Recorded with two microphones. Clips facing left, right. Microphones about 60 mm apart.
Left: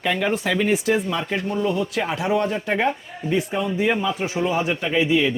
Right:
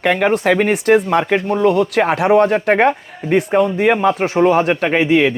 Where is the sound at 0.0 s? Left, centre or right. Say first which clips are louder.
Right 7 dB; right.